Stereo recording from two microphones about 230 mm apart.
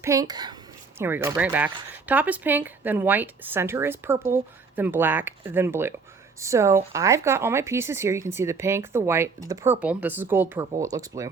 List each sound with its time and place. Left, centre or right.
0.0 s speech: centre